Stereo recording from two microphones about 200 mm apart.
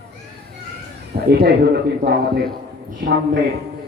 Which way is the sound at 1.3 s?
50° right (ahead or behind).